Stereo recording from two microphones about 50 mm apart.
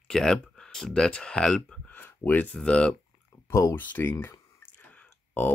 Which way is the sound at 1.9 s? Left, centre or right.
Left.